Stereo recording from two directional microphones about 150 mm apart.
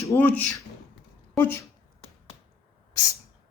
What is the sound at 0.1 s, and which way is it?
Speech, 10° left (ahead or behind).